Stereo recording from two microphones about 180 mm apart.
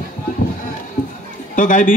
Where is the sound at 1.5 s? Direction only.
45° left (ahead or behind).